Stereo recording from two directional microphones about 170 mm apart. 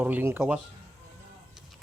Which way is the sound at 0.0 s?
10° right (ahead or behind).